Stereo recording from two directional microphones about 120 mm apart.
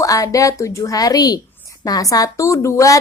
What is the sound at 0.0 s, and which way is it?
A woman's voice, 30° left (ahead or behind).